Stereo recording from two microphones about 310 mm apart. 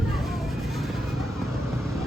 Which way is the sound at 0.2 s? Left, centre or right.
Centre.